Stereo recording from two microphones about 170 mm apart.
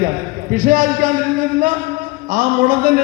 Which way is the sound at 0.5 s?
55° right (ahead or behind).